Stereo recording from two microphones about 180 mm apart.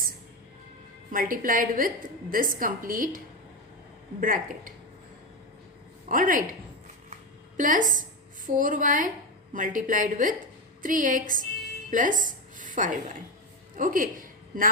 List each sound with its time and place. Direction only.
1.1 s a woman's voice: 50° right (ahead or behind)
4.2 s a woman's voice: 50° right (ahead or behind)
6.1 s a woman's voice: 50° right (ahead or behind)
7.1 s a sound: 45° right (ahead or behind)
8.4 s a woman's voice: 50° right (ahead or behind)